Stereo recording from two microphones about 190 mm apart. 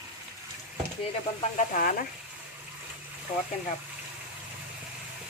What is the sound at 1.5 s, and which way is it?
Speech, 40° left (ahead or behind).